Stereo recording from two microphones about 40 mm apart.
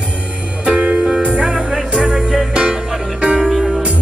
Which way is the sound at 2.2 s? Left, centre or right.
Centre.